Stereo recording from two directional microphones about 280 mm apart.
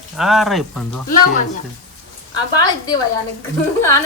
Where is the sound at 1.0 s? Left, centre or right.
Left.